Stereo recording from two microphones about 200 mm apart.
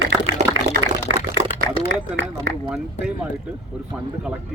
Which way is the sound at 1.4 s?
35° right (ahead or behind).